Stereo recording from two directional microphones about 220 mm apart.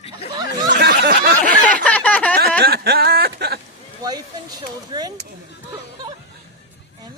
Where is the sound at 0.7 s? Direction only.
45° right (ahead or behind).